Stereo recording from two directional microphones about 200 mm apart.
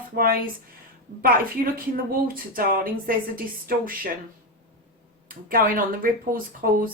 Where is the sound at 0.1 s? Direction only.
45° right (ahead or behind).